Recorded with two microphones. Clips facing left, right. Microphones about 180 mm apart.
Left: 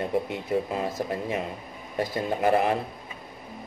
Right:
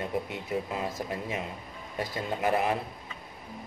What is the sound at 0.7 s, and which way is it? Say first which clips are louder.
Speech: left 4 dB; 45° left (ahead or behind).